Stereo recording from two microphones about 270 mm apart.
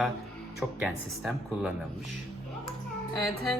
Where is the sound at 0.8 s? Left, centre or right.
Centre.